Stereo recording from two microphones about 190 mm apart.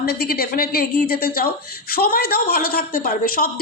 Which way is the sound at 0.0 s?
55° left (ahead or behind).